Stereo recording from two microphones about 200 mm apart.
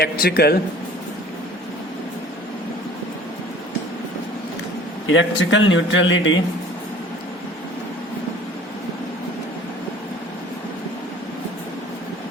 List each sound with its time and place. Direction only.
0.0 s speech: 50° left (ahead or behind)
5.0 s speech: 70° left (ahead or behind)